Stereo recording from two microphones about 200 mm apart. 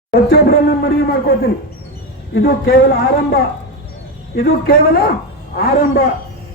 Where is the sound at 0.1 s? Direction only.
50° left (ahead or behind).